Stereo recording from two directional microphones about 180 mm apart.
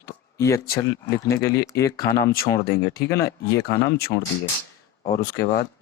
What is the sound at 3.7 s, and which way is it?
Speech, 60° left (ahead or behind).